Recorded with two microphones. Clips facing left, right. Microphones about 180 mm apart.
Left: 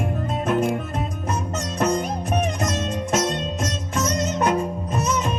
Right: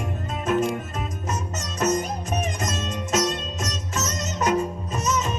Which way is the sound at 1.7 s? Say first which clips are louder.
Left 1 dB; 55° left (ahead or behind).